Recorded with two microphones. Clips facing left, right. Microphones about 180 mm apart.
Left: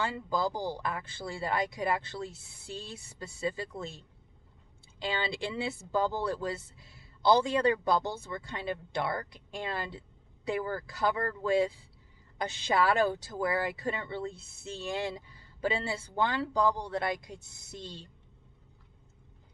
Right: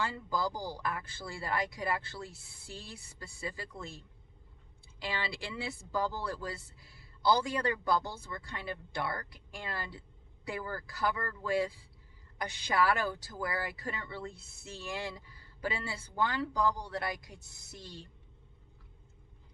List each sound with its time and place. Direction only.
0.0 s speech: 25° left (ahead or behind)